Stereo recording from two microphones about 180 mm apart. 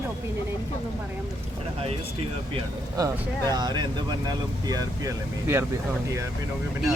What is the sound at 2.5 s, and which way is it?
Speech, 20° right (ahead or behind).